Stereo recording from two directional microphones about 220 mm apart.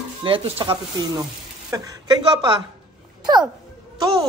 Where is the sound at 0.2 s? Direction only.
25° right (ahead or behind).